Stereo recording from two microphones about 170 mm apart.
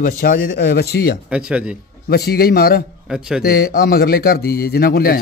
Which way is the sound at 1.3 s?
5° right (ahead or behind).